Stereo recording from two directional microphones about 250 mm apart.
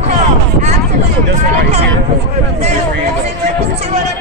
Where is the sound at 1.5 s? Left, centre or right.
Right.